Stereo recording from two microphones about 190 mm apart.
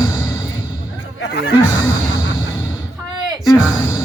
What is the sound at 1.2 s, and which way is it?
Speech, 60° left (ahead or behind).